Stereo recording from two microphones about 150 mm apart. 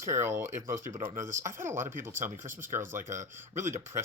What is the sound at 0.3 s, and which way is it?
Speech, 15° right (ahead or behind).